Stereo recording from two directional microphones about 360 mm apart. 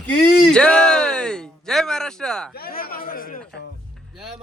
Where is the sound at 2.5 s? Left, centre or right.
Left.